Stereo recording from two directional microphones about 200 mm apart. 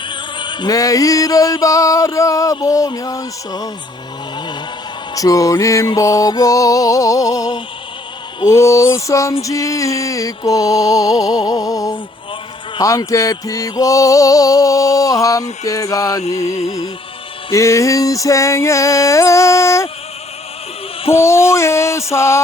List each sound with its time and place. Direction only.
0.1 s music: 25° left (ahead or behind)
5.1 s music: 15° left (ahead or behind)
21.1 s music: 15° left (ahead or behind)